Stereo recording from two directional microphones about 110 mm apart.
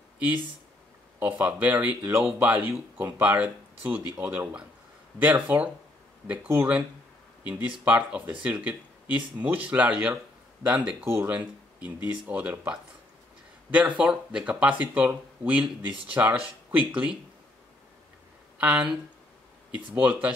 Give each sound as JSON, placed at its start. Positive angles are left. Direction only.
{"t": 1.2, "sound": "speech", "side_deg": -15}
{"t": 18.6, "sound": "speech", "side_deg": -10}